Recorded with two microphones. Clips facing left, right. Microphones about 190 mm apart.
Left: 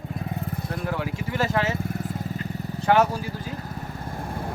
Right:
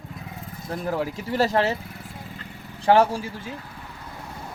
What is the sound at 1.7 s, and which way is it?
Vehicle, 45° left (ahead or behind).